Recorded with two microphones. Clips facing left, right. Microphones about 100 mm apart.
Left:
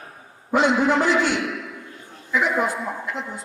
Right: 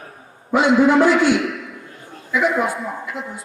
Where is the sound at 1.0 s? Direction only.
50° right (ahead or behind).